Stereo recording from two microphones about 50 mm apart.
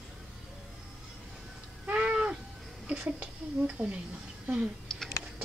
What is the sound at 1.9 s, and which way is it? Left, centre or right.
Cat, right.